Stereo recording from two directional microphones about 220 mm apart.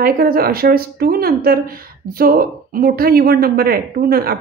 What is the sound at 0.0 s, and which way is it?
Speech, 45° right (ahead or behind).